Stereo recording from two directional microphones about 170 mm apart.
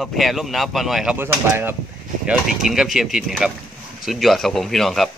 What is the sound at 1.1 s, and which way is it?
Speech, 15° right (ahead or behind).